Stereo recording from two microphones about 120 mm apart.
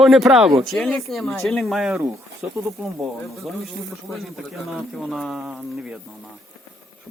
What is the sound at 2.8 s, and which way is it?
A woman's voice, centre (ahead or behind).